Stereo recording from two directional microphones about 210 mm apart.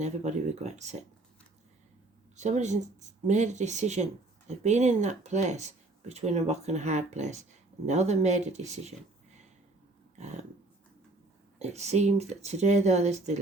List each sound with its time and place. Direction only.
0.0 s speech: 35° right (ahead or behind)
2.3 s speech: 35° right (ahead or behind)
10.2 s a sound: 35° right (ahead or behind)
11.6 s speech: 30° right (ahead or behind)